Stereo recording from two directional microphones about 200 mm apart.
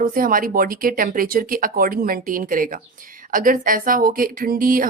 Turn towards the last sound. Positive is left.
turn(degrees=-45)  # may be behind; listen again after turning